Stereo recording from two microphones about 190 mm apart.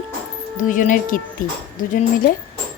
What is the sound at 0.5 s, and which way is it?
Speech, 45° left (ahead or behind).